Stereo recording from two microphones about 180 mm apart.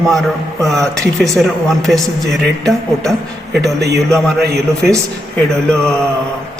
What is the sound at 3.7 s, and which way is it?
Speech, 65° right (ahead or behind).